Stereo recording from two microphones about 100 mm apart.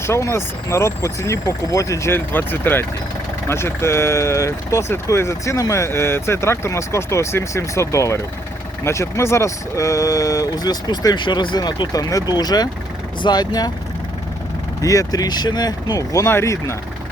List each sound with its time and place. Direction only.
0.0 s speech: 30° left (ahead or behind)
14.8 s speech: 35° left (ahead or behind)